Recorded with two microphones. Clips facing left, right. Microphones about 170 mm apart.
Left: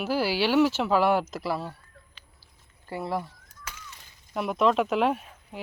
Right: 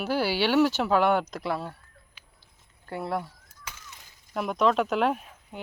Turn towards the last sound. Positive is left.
turn(degrees=0)  # may be behind; listen again after turning